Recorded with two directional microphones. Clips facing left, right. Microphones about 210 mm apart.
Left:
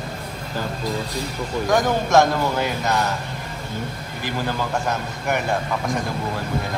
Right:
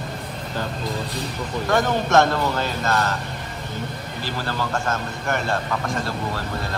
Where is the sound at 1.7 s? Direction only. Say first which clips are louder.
Left 1 dB; 10° left (ahead or behind).